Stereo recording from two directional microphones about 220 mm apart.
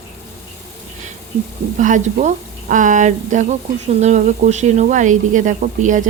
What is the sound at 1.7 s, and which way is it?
Speech, 35° right (ahead or behind).